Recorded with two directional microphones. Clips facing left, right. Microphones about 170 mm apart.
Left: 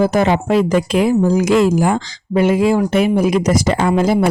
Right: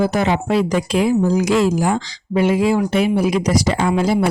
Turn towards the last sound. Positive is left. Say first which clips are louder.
# left 3 dB
turn(degrees=50)  # may be behind; listen again after turning